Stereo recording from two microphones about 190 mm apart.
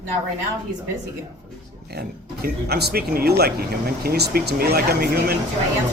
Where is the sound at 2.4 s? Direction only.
55° right (ahead or behind).